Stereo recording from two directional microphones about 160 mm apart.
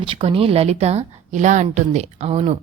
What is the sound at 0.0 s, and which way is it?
A woman's voice, 35° right (ahead or behind).